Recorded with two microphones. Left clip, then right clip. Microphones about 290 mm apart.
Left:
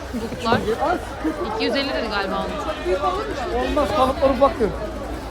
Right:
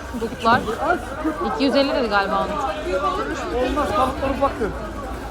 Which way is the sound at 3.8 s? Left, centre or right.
Left.